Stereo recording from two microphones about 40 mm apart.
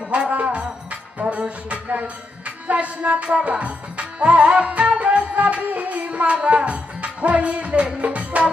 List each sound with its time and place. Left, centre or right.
0.1 s music: right
6.3 s music: right